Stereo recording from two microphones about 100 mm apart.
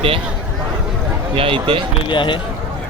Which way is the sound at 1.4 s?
60° right (ahead or behind).